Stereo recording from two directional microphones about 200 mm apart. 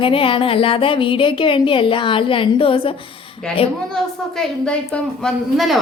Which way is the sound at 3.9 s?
5° left (ahead or behind).